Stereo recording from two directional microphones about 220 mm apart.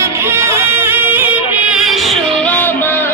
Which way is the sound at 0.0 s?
10° right (ahead or behind).